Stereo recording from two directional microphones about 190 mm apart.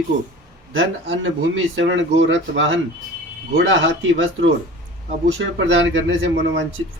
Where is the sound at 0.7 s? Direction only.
90° right.